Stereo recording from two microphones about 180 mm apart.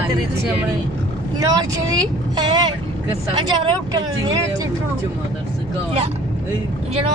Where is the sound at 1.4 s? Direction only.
20° right (ahead or behind).